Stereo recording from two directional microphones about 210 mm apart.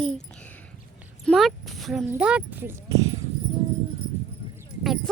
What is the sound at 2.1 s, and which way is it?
Speech, 5° right (ahead or behind).